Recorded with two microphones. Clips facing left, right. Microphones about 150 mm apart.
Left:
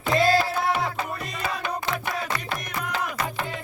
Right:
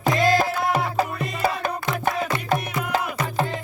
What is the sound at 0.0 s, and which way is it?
Music, 40° right (ahead or behind).